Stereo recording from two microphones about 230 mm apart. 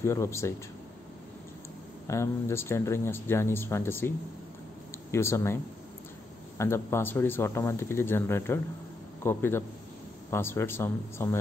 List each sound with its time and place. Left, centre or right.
0.0 s speech: centre
2.0 s speech: centre
5.1 s speech: centre
6.6 s speech: centre